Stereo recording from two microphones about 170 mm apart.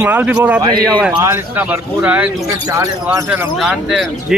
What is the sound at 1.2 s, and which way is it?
Speech, 15° right (ahead or behind).